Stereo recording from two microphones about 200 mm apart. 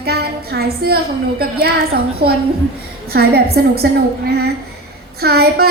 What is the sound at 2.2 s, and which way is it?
Speech, 50° right (ahead or behind).